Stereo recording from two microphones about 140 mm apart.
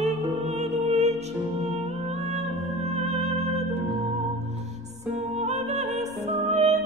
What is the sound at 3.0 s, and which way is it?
Music, 50° right (ahead or behind).